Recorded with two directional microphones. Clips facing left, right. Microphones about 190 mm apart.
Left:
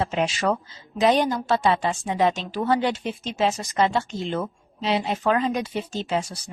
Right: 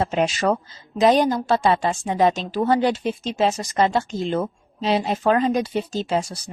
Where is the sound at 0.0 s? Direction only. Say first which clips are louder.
Right 3 dB; 40° right (ahead or behind).